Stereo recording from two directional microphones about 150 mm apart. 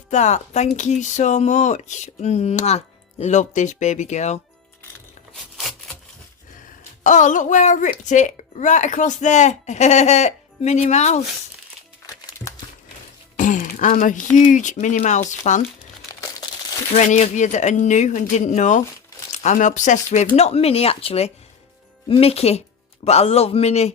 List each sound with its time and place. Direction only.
0.1 s speech: 50° left (ahead or behind)
5.5 s a sound: centre (ahead or behind)
7.0 s speech: 55° left (ahead or behind)
12.0 s music: 25° left (ahead or behind)
13.3 s speech: 60° left (ahead or behind)
16.9 s speech: 50° left (ahead or behind)